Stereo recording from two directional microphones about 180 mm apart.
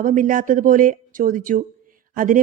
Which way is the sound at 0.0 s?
50° right (ahead or behind).